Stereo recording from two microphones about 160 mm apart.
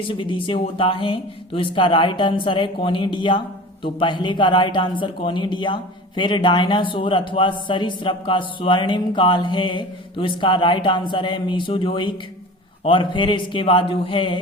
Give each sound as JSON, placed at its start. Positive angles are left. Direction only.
{"t": 0.1, "sound": "speech", "side_deg": 30}